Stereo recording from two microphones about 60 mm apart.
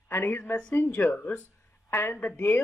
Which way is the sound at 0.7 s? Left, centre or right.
Left.